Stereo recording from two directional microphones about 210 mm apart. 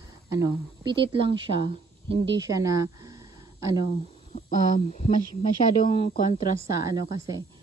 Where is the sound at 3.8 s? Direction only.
35° left (ahead or behind).